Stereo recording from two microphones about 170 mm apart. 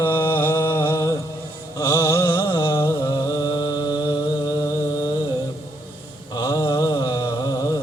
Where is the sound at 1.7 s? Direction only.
20° left (ahead or behind).